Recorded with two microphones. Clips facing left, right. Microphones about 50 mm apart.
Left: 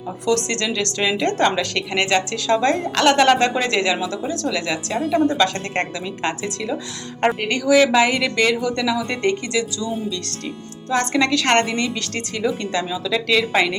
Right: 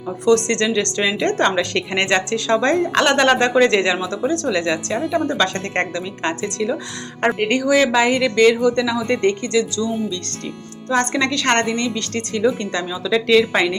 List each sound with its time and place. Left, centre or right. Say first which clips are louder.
0.3 s a woman's voice: right 5 dB; centre
7.3 s a woman's voice: right 4 dB; centre
7.7 s a woman's voice: left 2 dB; centre
9.2 s speech: right 2 dB; centre
10.8 s a woman's voice: even; centre
13.1 s a woman's voice: right 6 dB; centre
13.5 s a woman's voice: even; centre